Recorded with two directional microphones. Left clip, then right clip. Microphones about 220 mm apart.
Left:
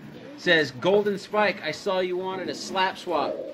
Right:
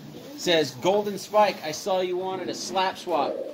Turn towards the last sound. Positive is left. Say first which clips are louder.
# even
turn(degrees=20)  # may be behind; listen again after turning